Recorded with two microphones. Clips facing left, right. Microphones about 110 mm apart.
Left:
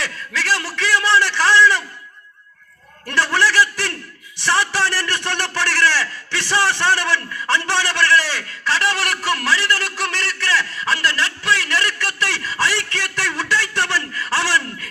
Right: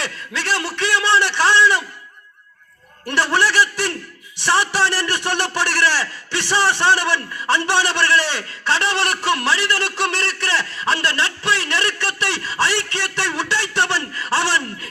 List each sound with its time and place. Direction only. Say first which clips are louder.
0.0 s a man's voice: left 1 dB; 25° right (ahead or behind)
3.1 s a man's voice: even; 15° right (ahead or behind)